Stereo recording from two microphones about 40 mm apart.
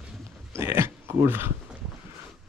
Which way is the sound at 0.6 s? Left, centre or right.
Right.